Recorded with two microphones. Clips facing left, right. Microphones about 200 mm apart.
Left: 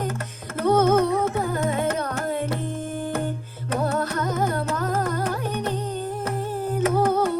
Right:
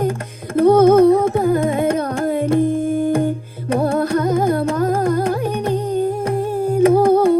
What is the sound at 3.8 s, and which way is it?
Music, 30° right (ahead or behind).